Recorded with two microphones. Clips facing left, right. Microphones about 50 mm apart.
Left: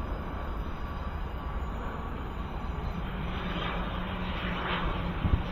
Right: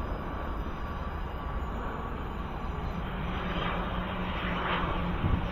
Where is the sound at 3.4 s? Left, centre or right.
Right.